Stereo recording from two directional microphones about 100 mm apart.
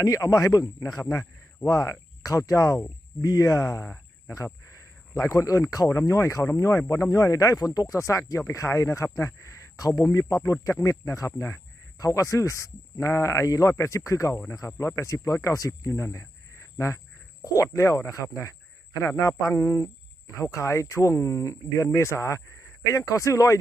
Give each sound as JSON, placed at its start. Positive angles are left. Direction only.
{"t": 0.0, "sound": "a man's voice", "side_deg": 35}